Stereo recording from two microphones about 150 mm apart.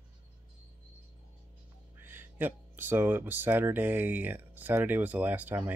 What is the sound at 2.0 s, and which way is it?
Speech, 15° right (ahead or behind).